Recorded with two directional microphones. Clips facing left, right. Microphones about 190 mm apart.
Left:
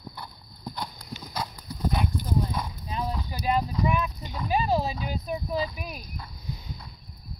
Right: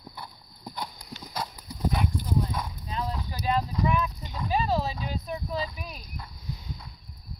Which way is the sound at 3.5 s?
5° left (ahead or behind).